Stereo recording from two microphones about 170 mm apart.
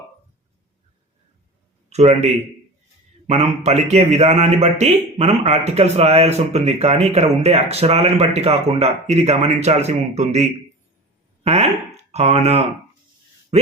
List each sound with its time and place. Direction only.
1.9 s a man's voice: 40° right (ahead or behind)